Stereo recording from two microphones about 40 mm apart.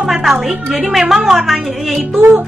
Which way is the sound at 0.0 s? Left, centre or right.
Centre.